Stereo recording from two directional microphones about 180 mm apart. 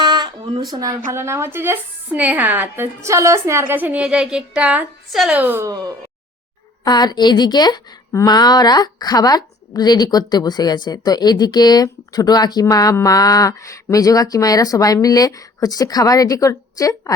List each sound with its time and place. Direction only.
0.0 s a sound: 25° right (ahead or behind)
0.7 s a woman's voice: 20° right (ahead or behind)
6.8 s a woman's voice: 25° left (ahead or behind)